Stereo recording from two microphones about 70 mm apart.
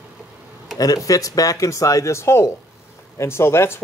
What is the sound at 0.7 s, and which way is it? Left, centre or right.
Speech, left.